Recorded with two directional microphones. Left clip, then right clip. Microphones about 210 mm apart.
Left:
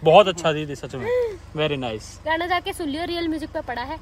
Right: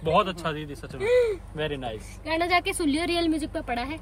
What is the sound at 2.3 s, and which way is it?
Speech, 15° left (ahead or behind).